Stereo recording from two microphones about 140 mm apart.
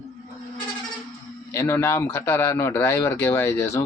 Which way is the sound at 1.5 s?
15° left (ahead or behind).